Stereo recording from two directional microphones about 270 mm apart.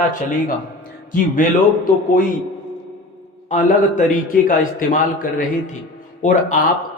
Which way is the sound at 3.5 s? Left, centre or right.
Left.